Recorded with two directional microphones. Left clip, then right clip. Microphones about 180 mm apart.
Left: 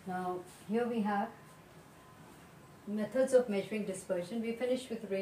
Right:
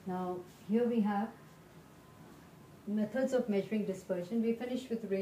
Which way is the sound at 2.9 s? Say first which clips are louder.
Left 4 dB; 30° left (ahead or behind).